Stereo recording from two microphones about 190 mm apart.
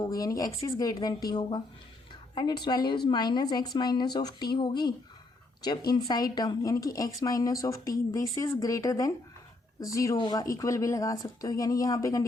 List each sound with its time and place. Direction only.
0.0 s speech: 20° left (ahead or behind)